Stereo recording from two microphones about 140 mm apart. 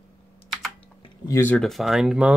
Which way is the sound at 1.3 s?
15° left (ahead or behind).